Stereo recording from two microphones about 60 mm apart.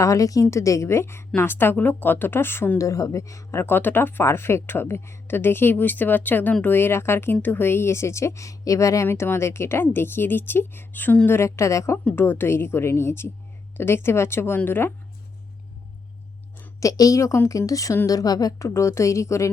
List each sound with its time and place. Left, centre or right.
0.0 s a woman's voice: left
0.5 s a woman's voice: left
2.7 s a woman's voice: left
3.8 s speech: left
6.7 s a woman's voice: left
9.0 s speech: left
11.3 s a woman's voice: left
12.1 s a woman's voice: left
16.8 s a woman's voice: left
18.0 s a woman's voice: left
18.7 s a woman's voice: left